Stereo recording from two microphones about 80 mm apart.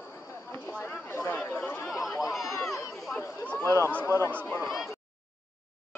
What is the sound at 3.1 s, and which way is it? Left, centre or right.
Speech, centre.